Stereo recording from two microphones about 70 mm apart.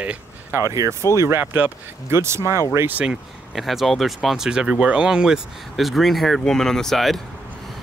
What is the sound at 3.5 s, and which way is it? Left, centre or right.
Speech, centre.